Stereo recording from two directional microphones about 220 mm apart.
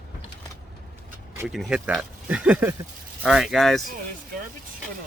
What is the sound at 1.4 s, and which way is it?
Speech, 5° right (ahead or behind).